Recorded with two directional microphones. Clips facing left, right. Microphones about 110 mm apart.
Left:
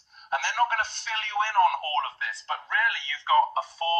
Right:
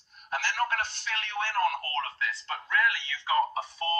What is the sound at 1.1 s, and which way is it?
Speech, 25° left (ahead or behind).